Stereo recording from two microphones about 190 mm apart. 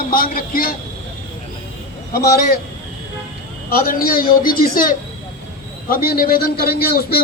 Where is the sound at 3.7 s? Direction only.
50° left (ahead or behind).